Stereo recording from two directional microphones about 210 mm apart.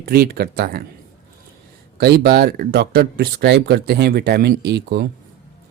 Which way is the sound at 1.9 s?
50° right (ahead or behind).